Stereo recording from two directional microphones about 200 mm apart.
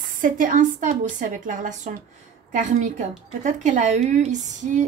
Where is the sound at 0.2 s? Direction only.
40° right (ahead or behind).